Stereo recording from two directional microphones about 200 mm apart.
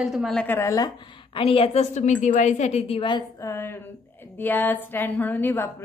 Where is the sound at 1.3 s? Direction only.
25° left (ahead or behind).